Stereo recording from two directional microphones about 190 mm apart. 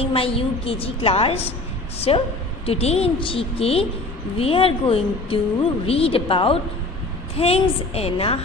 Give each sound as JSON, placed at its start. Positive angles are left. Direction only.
{"t": 0.0, "sound": "a woman's voice", "side_deg": 30}